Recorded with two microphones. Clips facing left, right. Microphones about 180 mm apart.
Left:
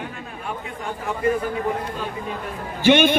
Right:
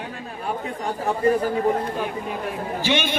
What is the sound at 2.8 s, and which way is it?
Speech, 55° left (ahead or behind).